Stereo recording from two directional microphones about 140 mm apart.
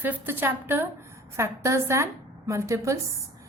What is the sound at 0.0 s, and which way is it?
A woman's voice, 15° right (ahead or behind).